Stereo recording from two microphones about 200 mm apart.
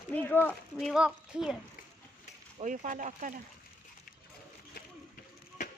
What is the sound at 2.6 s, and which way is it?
Speech, 40° right (ahead or behind).